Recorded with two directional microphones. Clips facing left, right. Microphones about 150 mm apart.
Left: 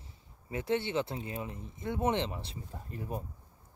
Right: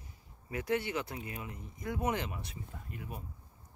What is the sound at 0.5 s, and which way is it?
Speech, 25° left (ahead or behind).